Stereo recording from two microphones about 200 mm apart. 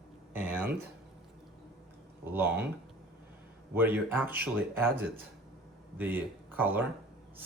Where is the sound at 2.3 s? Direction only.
10° right (ahead or behind).